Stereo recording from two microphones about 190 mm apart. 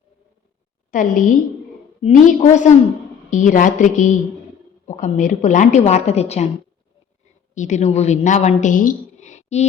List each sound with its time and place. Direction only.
0.9 s a woman's voice: 40° left (ahead or behind)
7.5 s a woman's voice: 40° left (ahead or behind)